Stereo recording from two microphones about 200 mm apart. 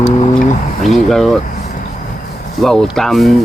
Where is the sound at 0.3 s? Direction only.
Centre (ahead or behind).